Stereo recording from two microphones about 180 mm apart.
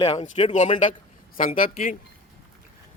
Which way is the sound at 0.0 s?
35° left (ahead or behind).